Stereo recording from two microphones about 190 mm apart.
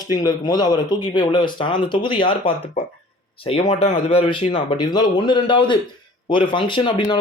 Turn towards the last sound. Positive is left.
turn(degrees=25)  # may be behind; listen again after turning